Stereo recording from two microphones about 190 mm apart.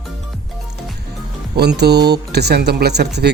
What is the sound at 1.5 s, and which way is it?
Speech, 60° right (ahead or behind).